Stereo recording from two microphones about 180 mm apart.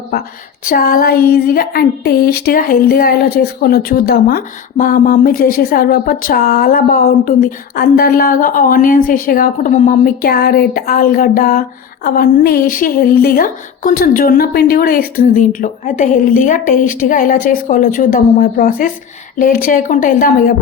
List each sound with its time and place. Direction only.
0.6 s child singing: 55° left (ahead or behind)